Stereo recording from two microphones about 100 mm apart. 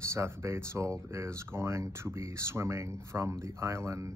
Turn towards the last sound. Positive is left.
turn(degrees=-30)  # may be behind; listen again after turning